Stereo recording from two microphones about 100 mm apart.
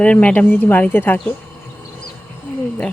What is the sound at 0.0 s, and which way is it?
Speech, 15° left (ahead or behind).